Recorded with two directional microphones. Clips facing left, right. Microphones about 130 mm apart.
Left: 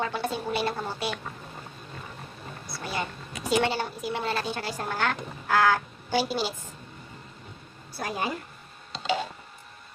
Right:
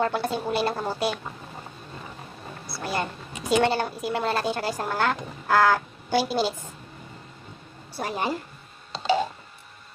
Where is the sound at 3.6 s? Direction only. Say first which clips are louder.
Right 6 dB; 50° right (ahead or behind).